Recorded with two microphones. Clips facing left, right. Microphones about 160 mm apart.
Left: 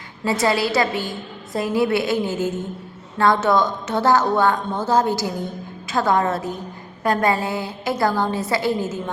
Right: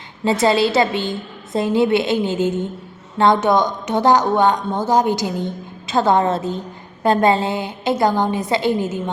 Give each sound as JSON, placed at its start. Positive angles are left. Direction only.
{"t": 0.4, "sound": "a woman's voice", "side_deg": -25}